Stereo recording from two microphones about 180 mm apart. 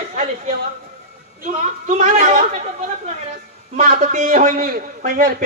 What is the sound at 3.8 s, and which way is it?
A man's voice, 45° right (ahead or behind).